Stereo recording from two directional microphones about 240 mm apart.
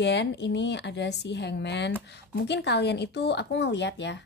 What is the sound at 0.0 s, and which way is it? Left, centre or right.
Speech, left.